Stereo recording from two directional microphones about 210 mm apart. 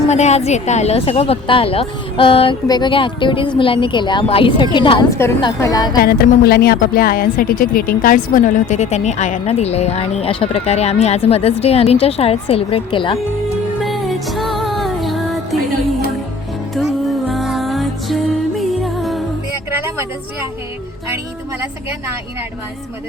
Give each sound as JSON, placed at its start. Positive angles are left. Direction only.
{"t": 0.1, "sound": "speech", "side_deg": 30}
{"t": 6.0, "sound": "a woman's voice", "side_deg": 45}
{"t": 13.8, "sound": "music", "side_deg": 0}
{"t": 16.7, "sound": "music", "side_deg": 0}